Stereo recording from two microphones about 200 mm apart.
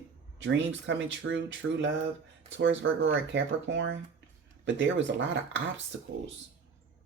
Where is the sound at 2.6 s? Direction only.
70° right (ahead or behind).